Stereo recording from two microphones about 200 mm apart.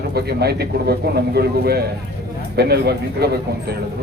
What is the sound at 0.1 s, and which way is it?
Speech, 55° right (ahead or behind).